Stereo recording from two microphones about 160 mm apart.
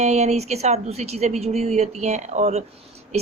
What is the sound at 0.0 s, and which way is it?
A woman's voice, 45° right (ahead or behind).